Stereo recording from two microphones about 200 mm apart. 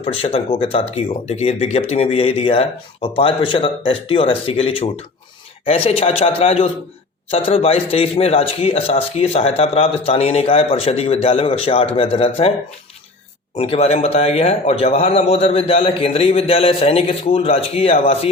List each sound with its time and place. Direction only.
0.0 s speech: 30° left (ahead or behind)
13.6 s a man's voice: 30° left (ahead or behind)